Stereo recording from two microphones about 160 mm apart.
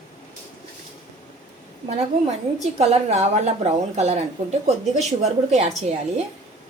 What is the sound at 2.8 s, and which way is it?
A woman's voice, 40° right (ahead or behind).